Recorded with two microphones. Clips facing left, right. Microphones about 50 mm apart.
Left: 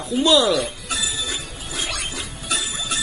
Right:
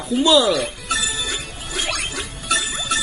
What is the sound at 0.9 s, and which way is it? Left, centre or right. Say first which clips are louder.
Music: right 3 dB; right.